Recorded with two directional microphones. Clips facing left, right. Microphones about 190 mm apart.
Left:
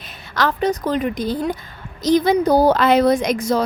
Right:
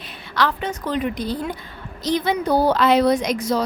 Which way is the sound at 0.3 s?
40° left (ahead or behind).